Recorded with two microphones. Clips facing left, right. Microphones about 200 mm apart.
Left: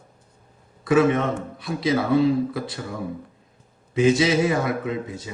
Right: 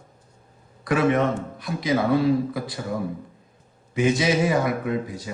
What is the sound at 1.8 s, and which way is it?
Speech, 25° left (ahead or behind).